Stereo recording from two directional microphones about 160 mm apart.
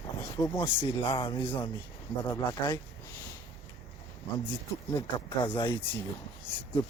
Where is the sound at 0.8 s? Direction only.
30° left (ahead or behind).